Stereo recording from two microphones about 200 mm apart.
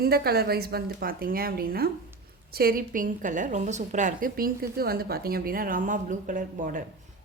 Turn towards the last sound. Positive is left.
turn(degrees=-40)  # may be behind; listen again after turning